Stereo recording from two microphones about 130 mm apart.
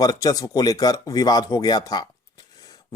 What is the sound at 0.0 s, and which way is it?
Speech, 30° left (ahead or behind).